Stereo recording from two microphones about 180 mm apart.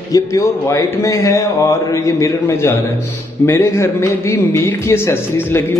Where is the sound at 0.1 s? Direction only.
15° left (ahead or behind).